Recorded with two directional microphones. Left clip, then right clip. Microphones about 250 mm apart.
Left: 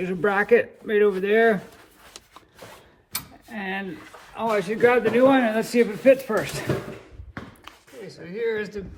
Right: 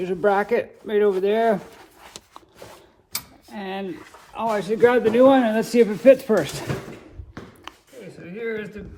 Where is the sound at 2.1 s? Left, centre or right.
Centre.